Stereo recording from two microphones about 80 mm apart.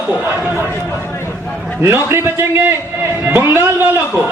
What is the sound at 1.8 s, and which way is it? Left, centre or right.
A man's voice, right.